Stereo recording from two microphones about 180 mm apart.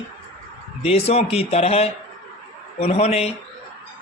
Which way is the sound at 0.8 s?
35° left (ahead or behind).